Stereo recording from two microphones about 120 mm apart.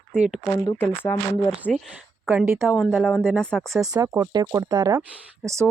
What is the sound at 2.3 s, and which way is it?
Speech, 15° right (ahead or behind).